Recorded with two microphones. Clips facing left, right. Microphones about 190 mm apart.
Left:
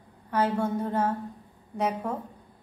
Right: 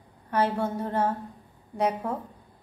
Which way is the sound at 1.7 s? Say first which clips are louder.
Right 2 dB; 10° right (ahead or behind).